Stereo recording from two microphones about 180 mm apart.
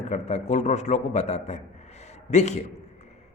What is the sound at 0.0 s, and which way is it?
A man's voice, 40° left (ahead or behind).